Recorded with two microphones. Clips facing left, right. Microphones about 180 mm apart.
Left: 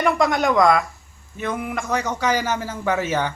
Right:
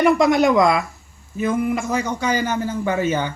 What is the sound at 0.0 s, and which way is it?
Speech, 5° right (ahead or behind).